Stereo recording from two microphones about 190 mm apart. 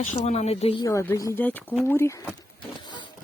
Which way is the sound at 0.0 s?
40° left (ahead or behind).